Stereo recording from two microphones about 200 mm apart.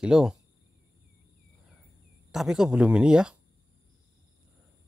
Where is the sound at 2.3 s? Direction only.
Centre (ahead or behind).